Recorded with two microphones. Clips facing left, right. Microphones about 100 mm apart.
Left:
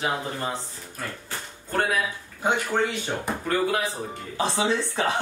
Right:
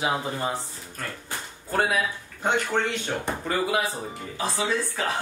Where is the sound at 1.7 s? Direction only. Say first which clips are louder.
Right 1 dB; 5° right (ahead or behind).